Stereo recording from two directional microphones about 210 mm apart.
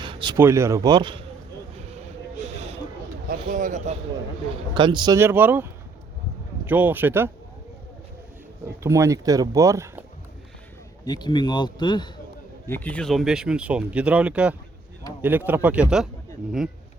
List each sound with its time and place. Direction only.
0.0 s speech: 20° right (ahead or behind)
3.2 s speech: 40° right (ahead or behind)
4.7 s speech: 20° right (ahead or behind)
8.6 s speech: 15° right (ahead or behind)
11.0 s speech: 20° left (ahead or behind)
12.6 s speech: 10° left (ahead or behind)